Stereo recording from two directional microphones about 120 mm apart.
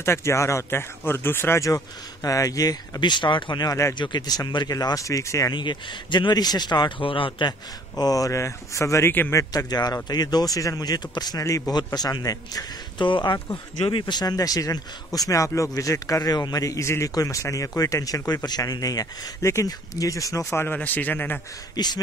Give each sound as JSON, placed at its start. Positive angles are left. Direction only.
{"t": 0.0, "sound": "speech", "side_deg": 20}
{"t": 5.5, "sound": "speech", "side_deg": 40}
{"t": 13.1, "sound": "speech", "side_deg": 40}
{"t": 20.5, "sound": "a man's voice", "side_deg": 15}
{"t": 21.7, "sound": "speech", "side_deg": 35}